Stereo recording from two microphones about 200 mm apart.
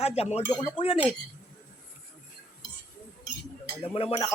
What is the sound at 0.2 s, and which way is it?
Speech, 30° left (ahead or behind).